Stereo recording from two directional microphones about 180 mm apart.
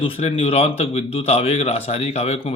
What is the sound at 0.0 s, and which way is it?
Speech, 35° left (ahead or behind).